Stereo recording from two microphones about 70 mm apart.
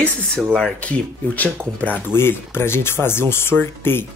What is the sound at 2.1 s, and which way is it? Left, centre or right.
Speech, left.